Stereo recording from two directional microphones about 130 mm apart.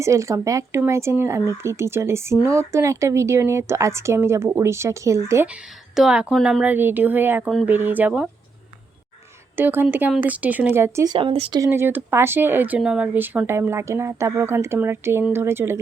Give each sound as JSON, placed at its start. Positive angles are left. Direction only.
{"t": 0.0, "sound": "speech", "side_deg": -25}
{"t": 5.5, "sound": "a woman's voice", "side_deg": -5}
{"t": 9.6, "sound": "a woman's voice", "side_deg": -15}
{"t": 11.1, "sound": "speech", "side_deg": -45}
{"t": 11.7, "sound": "speech", "side_deg": -15}